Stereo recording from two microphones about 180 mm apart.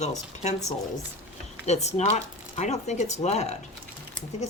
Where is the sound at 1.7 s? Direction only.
40° left (ahead or behind).